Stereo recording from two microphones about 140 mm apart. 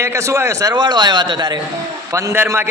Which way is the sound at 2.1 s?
20° right (ahead or behind).